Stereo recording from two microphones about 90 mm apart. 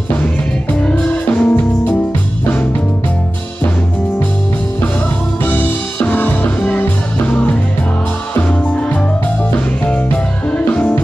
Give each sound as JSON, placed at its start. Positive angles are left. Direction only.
{"t": 1.4, "sound": "music", "side_deg": 20}
{"t": 5.4, "sound": "music", "side_deg": 20}
{"t": 10.7, "sound": "music", "side_deg": 10}